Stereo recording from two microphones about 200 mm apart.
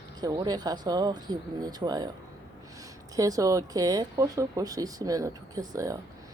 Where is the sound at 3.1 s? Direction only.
15° right (ahead or behind).